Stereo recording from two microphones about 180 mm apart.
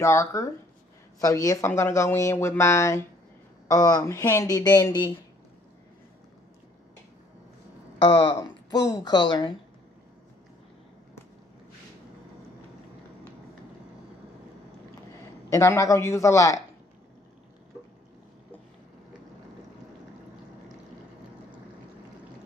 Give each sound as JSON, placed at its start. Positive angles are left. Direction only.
{"t": 0.0, "sound": "speech", "side_deg": 15}
{"t": 8.0, "sound": "speech", "side_deg": 25}
{"t": 15.5, "sound": "speech", "side_deg": 15}